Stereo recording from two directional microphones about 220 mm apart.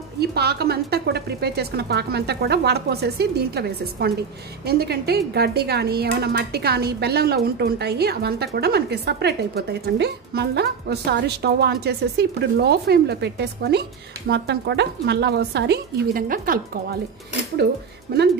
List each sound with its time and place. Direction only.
0.2 s a woman's voice: 45° right (ahead or behind)
18.1 s a woman's voice: 45° right (ahead or behind)